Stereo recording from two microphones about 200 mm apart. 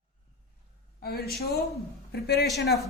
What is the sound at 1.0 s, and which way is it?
A woman's voice, 50° left (ahead or behind).